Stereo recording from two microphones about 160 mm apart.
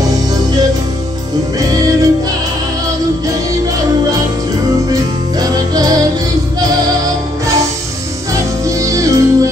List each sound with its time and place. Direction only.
0.3 s music: 25° right (ahead or behind)
4.9 s music: 25° right (ahead or behind)
8.3 s music: 20° right (ahead or behind)